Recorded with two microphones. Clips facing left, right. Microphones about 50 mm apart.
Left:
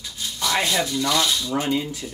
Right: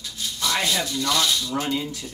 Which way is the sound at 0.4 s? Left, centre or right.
Centre.